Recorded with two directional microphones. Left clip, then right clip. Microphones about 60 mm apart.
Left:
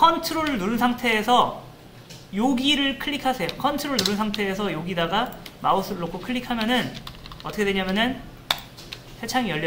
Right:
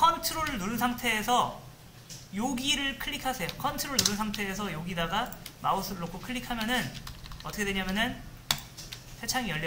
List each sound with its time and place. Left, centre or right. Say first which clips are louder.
0.0 s speech: left 6 dB; right
8.5 s computer keyboard: left 6 dB; centre
9.2 s speech: left 7 dB; right